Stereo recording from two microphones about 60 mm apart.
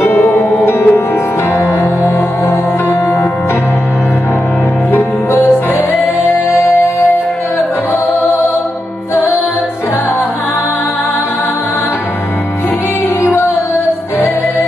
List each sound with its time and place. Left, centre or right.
0.1 s music: left
0.7 s music: left
4.9 s music: left
13.2 s music: left